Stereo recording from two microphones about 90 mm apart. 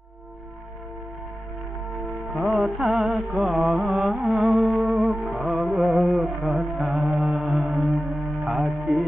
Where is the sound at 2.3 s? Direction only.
Centre (ahead or behind).